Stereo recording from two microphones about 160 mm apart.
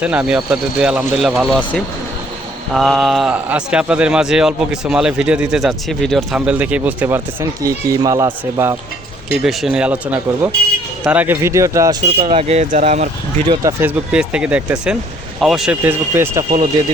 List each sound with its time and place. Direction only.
0.0 s a man's voice: 10° right (ahead or behind)
9.4 s a man's voice: centre (ahead or behind); by 13.1 s 45° right (ahead or behind)
13.5 s speech: 20° right (ahead or behind)